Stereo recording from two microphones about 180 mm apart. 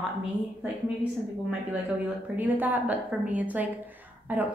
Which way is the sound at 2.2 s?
10° right (ahead or behind).